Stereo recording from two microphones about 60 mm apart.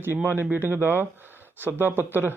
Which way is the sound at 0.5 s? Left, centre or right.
Right.